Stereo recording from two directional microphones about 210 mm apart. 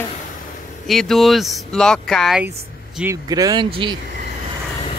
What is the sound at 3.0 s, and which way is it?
Speech, 15° right (ahead or behind).